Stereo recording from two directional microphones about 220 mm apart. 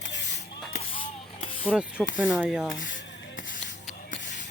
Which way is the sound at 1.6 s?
5° right (ahead or behind).